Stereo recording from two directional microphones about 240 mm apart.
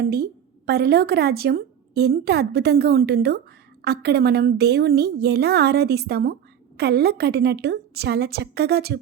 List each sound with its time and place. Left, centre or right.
0.0 s a woman's voice: right